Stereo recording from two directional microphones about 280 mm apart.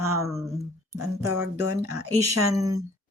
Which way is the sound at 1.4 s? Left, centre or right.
Right.